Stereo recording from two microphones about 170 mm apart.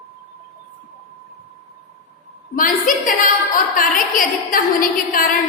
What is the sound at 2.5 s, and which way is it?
A woman's voice, 55° left (ahead or behind).